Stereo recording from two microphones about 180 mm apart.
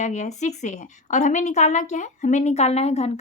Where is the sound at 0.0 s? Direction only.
40° left (ahead or behind).